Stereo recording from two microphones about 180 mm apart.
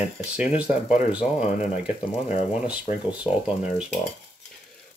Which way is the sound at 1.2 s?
40° left (ahead or behind).